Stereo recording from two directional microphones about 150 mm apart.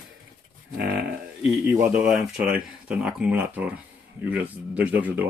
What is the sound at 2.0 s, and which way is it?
Speech, 5° right (ahead or behind).